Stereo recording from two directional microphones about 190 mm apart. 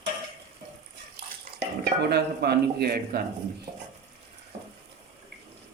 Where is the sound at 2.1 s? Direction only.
60° right (ahead or behind).